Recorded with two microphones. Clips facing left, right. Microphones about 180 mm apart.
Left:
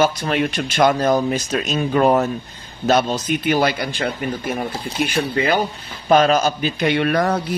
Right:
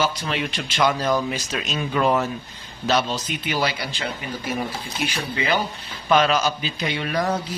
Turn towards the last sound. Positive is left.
turn(degrees=60)  # may be behind; listen again after turning